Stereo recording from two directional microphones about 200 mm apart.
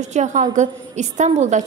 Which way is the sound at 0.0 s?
35° right (ahead or behind).